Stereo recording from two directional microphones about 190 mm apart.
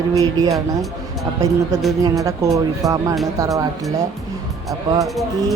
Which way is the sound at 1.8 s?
Centre (ahead or behind).